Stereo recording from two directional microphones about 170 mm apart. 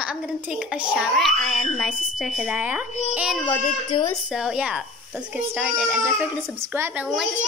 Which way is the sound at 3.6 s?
25° left (ahead or behind).